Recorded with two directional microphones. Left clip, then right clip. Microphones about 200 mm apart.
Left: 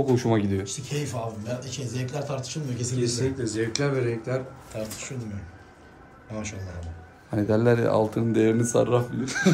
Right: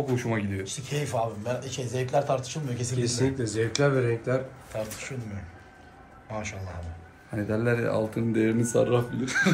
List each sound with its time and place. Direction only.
0.1 s speech: 60° left (ahead or behind)
0.7 s speech: 10° left (ahead or behind)
3.0 s a man's voice: 40° right (ahead or behind)
4.7 s speech: 10° left (ahead or behind)
7.3 s speech: 60° left (ahead or behind)
8.7 s speech: 10° left (ahead or behind)